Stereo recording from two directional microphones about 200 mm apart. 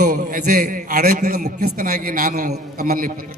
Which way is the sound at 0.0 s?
40° right (ahead or behind).